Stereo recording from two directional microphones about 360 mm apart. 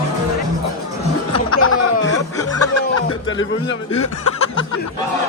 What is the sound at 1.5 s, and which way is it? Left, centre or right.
Snicker, left.